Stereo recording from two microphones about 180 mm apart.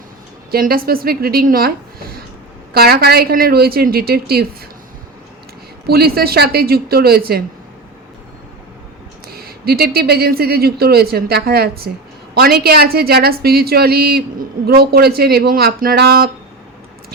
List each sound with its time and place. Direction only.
0.5 s a woman's voice: 55° right (ahead or behind)
5.9 s a woman's voice: 60° right (ahead or behind)
9.3 s a woman's voice: 60° right (ahead or behind)